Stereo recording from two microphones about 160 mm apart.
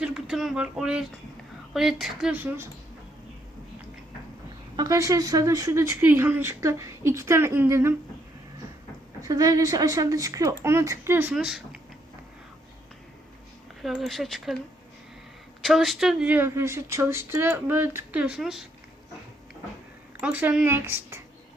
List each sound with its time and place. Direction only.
0.0 s speech: 5° right (ahead or behind)
4.8 s speech: 20° right (ahead or behind)
9.2 s speech: 25° right (ahead or behind)
11.3 s speech: 5° right (ahead or behind)
13.8 s speech: centre (ahead or behind)
15.6 s speech: centre (ahead or behind)
20.2 s speech: 10° right (ahead or behind)